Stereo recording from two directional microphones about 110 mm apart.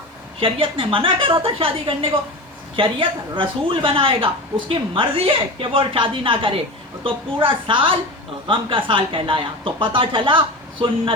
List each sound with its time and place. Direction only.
0.3 s a woman's voice: 55° right (ahead or behind)